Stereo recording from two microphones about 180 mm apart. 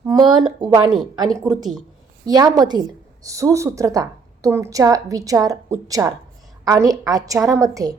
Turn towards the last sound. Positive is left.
turn(degrees=-20)  # may be behind; listen again after turning